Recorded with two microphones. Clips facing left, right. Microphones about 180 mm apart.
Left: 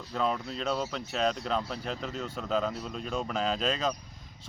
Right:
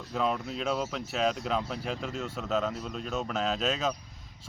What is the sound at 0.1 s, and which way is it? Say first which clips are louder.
Speech: right 1 dB; 5° right (ahead or behind).